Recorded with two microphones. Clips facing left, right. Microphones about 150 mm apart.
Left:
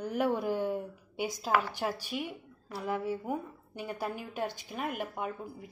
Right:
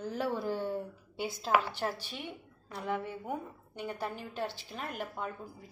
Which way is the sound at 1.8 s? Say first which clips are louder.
Left 3 dB; 10° left (ahead or behind).